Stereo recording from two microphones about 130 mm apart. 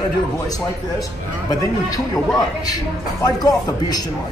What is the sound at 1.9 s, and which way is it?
A man's voice, 30° left (ahead or behind).